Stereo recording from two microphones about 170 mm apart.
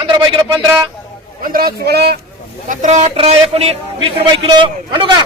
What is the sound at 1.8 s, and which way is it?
Speech, 70° right (ahead or behind).